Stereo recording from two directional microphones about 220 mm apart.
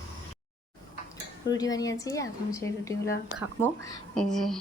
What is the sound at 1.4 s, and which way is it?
A woman's voice, 15° left (ahead or behind).